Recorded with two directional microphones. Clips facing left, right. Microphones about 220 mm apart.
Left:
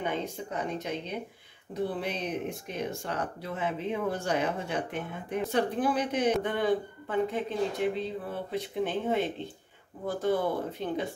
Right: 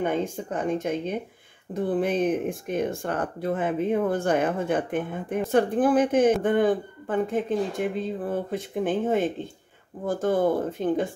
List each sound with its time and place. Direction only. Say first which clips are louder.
0.0 s speech: right 7 dB; 50° right (ahead or behind)